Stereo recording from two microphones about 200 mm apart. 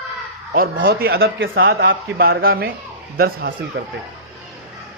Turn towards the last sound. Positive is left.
turn(degrees=-60)  # may be behind; listen again after turning